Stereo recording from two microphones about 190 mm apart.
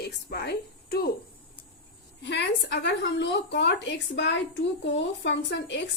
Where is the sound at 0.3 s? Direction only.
55° left (ahead or behind).